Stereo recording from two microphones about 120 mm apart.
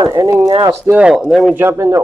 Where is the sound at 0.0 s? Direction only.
30° right (ahead or behind).